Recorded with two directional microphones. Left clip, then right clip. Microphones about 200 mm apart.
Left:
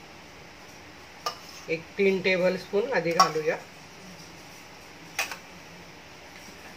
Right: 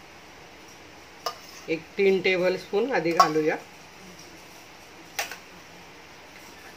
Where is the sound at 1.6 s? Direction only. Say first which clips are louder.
Right 2 dB; 40° right (ahead or behind).